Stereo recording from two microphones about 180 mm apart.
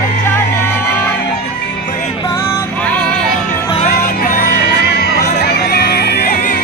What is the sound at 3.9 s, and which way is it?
Music, 50° left (ahead or behind).